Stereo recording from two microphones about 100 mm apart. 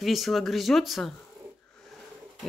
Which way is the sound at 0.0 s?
Centre (ahead or behind).